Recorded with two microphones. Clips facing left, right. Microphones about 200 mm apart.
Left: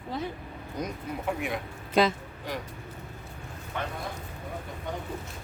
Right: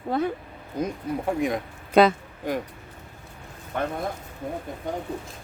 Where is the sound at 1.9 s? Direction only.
60° right (ahead or behind).